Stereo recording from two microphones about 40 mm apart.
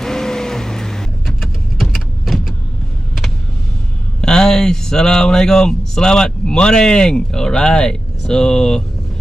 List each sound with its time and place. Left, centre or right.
0.0 s vehicle: centre
1.2 s vehicle: centre
4.2 s speech: centre